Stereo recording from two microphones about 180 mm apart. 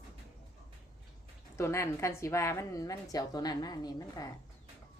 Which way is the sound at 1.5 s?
15° left (ahead or behind).